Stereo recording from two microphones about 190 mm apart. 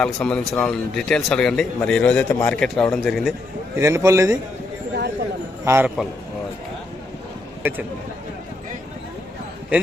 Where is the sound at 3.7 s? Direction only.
15° right (ahead or behind).